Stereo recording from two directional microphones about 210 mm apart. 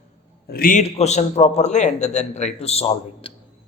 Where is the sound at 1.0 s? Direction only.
30° left (ahead or behind).